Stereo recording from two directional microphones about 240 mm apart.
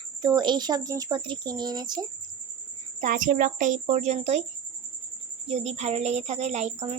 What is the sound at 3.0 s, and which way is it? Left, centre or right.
A child's voice, right.